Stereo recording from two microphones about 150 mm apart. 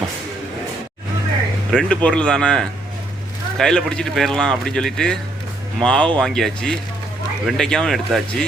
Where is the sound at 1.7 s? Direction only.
5° left (ahead or behind).